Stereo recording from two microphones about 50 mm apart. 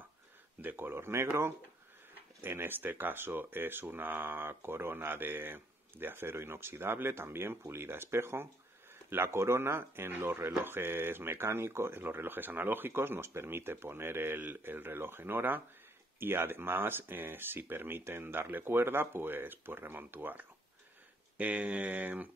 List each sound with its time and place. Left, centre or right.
0.6 s speech: right
2.4 s speech: right
12.0 s speech: right
21.4 s speech: right